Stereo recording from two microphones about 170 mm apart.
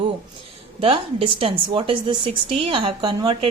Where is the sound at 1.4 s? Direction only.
30° right (ahead or behind).